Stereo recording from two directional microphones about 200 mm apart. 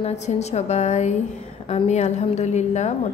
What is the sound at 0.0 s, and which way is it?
A woman's voice, 35° left (ahead or behind).